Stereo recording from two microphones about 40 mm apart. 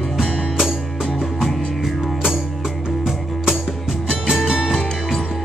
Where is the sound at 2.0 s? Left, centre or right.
Centre.